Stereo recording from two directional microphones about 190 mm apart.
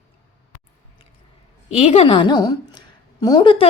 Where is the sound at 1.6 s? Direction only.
35° left (ahead or behind).